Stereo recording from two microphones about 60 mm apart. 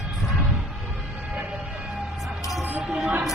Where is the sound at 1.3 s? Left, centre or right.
Right.